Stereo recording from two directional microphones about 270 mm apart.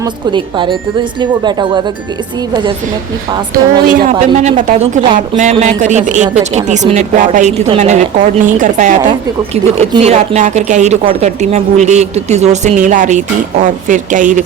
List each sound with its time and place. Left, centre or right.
0.0 s speech: centre
3.8 s a woman's voice: right